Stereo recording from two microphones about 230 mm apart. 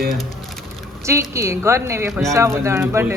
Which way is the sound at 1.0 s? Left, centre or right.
Centre.